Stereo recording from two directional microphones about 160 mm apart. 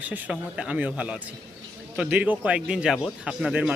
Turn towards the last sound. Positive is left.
turn(degrees=-5)  # may be behind; listen again after turning